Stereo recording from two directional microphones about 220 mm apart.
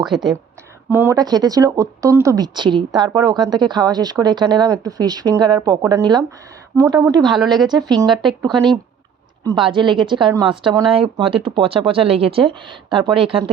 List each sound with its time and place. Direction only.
0.0 s speech: centre (ahead or behind); by 7.3 s 20° right (ahead or behind)
7.3 s speech: centre (ahead or behind)
7.9 s speech: 20° right (ahead or behind)
8.1 s speech: centre (ahead or behind)
8.4 s speech: 20° right (ahead or behind)